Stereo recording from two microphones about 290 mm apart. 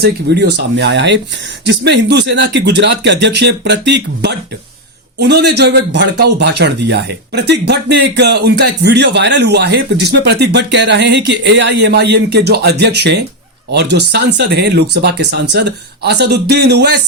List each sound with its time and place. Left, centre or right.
0.0 s a man's voice: right